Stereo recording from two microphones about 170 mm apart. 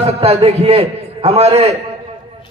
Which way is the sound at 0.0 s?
35° right (ahead or behind).